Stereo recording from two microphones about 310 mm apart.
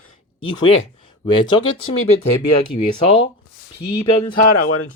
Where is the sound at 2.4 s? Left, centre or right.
Left.